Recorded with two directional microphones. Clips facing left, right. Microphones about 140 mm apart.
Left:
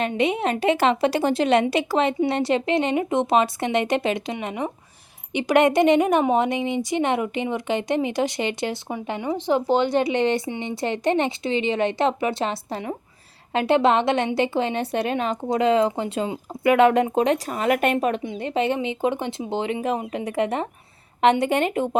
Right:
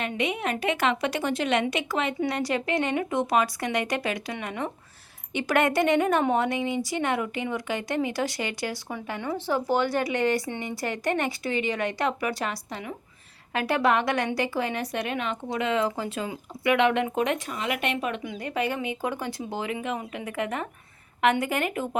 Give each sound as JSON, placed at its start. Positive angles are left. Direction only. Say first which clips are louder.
{"t": 0.0, "sound": "a woman's voice", "louder": "left 6 dB", "side_deg": 30}
{"t": 18.2, "sound": "a woman's voice", "louder": "left 5 dB", "side_deg": 25}